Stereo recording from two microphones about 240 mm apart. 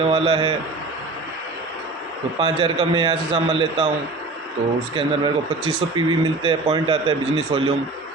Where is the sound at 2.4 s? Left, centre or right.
Right.